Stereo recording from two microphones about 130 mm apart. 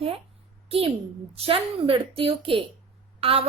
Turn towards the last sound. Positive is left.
turn(degrees=-45)  # may be behind; listen again after turning